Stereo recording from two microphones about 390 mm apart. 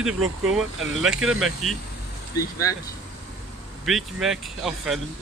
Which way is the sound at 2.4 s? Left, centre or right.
Centre.